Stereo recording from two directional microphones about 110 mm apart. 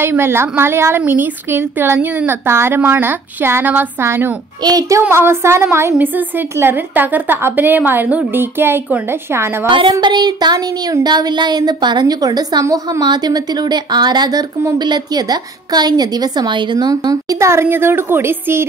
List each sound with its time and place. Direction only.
0.0 s a woman's voice: 20° right (ahead or behind)
4.6 s a woman's voice: 35° right (ahead or behind)
9.7 s speech: 45° right (ahead or behind); by 18.7 s 20° right (ahead or behind)